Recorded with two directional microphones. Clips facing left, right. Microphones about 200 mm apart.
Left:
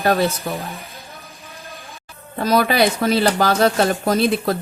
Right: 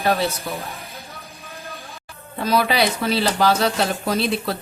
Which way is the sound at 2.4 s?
45° left (ahead or behind).